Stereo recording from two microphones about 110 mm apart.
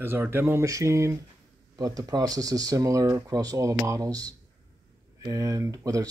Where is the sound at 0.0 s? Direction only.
20° right (ahead or behind).